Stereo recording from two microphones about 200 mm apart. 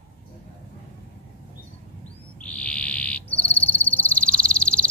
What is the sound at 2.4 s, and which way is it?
Frog, 5° left (ahead or behind).